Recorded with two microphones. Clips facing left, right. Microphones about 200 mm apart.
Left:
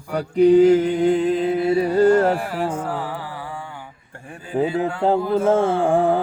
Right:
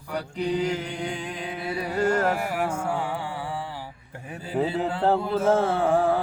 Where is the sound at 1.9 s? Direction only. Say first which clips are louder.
Left 6 dB; 35° left (ahead or behind).